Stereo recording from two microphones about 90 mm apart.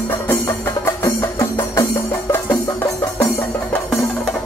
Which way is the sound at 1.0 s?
35° left (ahead or behind).